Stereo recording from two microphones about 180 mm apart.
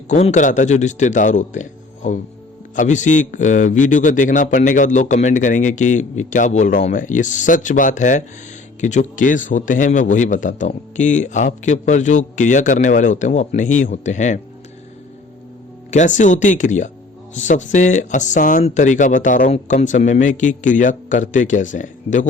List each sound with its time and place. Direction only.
0.1 s a man's voice: 40° left (ahead or behind)
15.9 s a man's voice: 45° left (ahead or behind)